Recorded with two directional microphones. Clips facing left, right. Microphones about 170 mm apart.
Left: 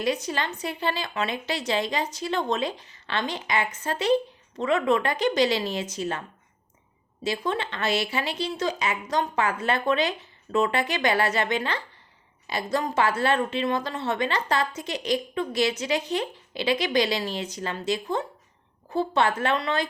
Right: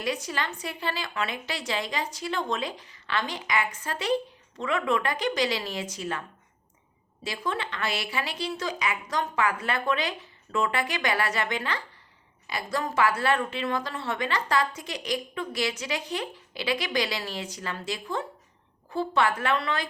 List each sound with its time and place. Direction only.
0.0 s a woman's voice: 25° left (ahead or behind)